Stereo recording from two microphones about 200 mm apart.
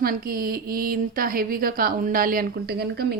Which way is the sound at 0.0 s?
45° right (ahead or behind).